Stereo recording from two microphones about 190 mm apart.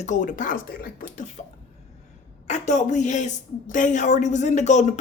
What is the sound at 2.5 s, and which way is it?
Speech, 40° left (ahead or behind).